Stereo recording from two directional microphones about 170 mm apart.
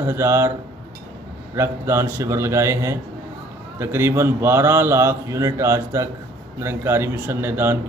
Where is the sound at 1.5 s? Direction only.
15° right (ahead or behind).